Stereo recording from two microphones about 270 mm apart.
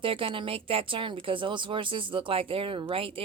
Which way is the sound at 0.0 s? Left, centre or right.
Centre.